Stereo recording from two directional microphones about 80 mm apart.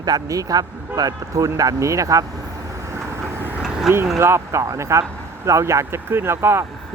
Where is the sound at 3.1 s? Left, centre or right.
Right.